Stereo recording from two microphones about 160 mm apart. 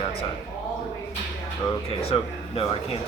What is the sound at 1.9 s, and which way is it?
Speech, 35° left (ahead or behind).